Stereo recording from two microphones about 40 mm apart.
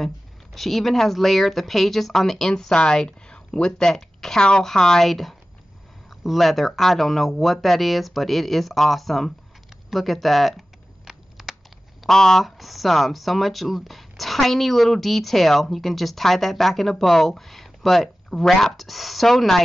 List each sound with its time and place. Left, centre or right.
0.6 s speech: centre
2.7 s a woman's voice: left
3.3 s a sound: left
4.4 s a woman's voice: left
5.0 s speech: centre
11.1 s a sound: centre
12.1 s speech: centre
12.4 s speech: centre